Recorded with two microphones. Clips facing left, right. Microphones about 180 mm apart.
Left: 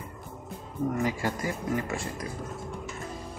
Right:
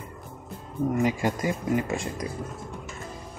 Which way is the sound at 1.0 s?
20° right (ahead or behind).